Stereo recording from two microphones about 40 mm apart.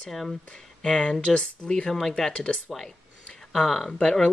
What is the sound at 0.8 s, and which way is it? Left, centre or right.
Speech, left.